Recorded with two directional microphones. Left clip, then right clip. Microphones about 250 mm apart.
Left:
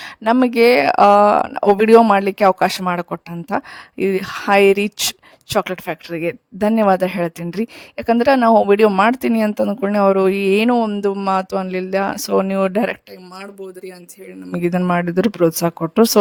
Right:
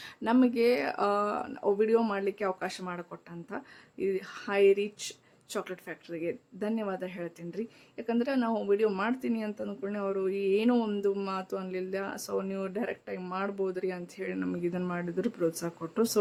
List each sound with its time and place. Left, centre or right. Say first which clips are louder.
0.0 s speech: left 11 dB; left
13.4 s speech: even; centre
14.5 s speech: left 15 dB; left